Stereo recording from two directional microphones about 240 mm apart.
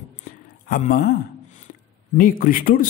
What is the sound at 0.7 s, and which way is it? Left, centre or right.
Speech, left.